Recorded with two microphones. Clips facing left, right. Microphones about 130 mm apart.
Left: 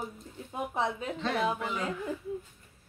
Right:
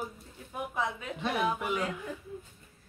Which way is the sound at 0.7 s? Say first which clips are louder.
Left 3 dB; 30° left (ahead or behind).